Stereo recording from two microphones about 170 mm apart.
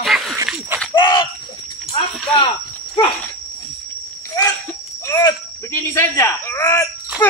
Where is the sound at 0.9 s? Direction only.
25° left (ahead or behind).